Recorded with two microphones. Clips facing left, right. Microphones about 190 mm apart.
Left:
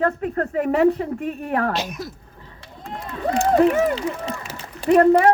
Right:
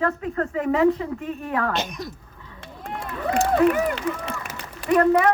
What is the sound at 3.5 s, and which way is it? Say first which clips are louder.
A woman's voice: left 3 dB; 25° left (ahead or behind).